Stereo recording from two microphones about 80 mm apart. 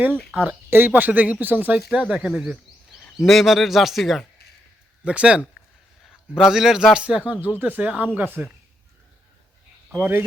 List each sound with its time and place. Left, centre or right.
0.3 s speech: right
1.9 s a man's voice: centre
5.0 s a man's voice: centre
7.4 s speech: right
9.9 s speech: right